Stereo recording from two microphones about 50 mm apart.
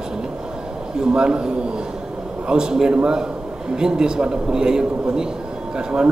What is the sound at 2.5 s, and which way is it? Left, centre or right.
A man's voice, centre.